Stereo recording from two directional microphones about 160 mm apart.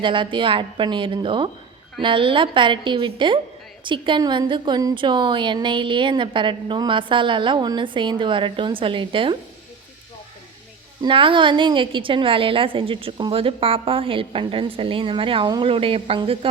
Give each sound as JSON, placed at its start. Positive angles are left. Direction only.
{"t": 0.0, "sound": "a woman's voice", "side_deg": -30}
{"t": 11.0, "sound": "a woman's voice", "side_deg": -30}